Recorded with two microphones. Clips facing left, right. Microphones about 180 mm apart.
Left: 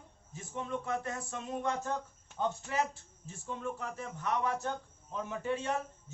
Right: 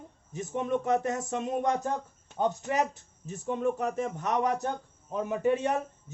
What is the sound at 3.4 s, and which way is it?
Speech, 65° right (ahead or behind).